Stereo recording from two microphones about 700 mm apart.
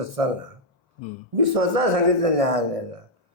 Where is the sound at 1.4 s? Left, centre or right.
Right.